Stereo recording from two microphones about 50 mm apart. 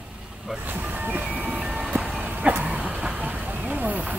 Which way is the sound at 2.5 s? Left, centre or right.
Right.